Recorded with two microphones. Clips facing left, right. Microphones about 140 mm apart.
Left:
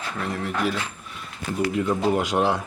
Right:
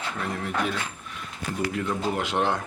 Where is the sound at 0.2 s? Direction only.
Centre (ahead or behind).